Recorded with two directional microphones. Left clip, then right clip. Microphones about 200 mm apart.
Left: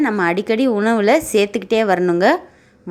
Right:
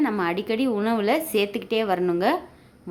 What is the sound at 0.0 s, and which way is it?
A woman's voice, 25° left (ahead or behind).